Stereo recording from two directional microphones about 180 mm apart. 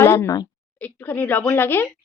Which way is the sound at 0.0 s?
15° left (ahead or behind).